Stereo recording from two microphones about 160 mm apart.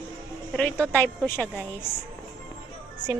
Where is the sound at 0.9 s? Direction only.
10° left (ahead or behind).